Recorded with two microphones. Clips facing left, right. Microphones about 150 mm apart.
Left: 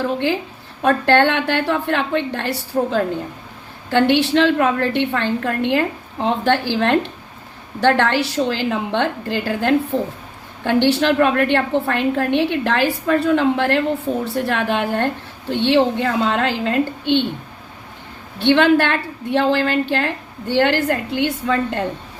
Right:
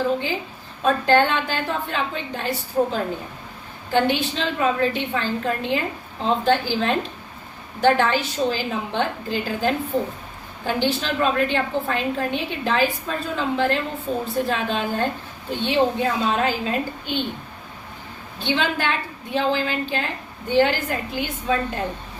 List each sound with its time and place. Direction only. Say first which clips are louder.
0.8 s a woman's voice: left 3 dB; 70° left (ahead or behind)
18.3 s a woman's voice: left 10 dB; 70° left (ahead or behind)